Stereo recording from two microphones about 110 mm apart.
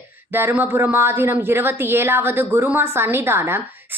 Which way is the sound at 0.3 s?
20° right (ahead or behind).